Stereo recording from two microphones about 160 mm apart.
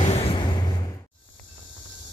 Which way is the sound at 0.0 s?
35° left (ahead or behind).